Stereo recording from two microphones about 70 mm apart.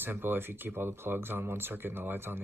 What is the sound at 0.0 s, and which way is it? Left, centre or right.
A man's voice, right.